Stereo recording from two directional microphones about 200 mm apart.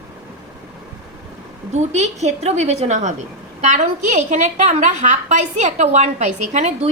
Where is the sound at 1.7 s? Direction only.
35° right (ahead or behind).